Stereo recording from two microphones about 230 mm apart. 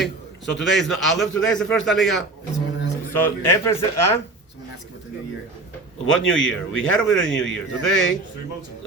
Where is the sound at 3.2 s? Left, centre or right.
Left.